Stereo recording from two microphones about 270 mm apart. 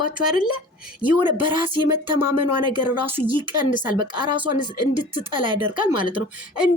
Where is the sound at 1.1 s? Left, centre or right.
Centre.